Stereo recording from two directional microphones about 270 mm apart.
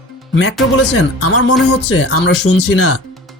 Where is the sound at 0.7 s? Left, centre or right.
Left.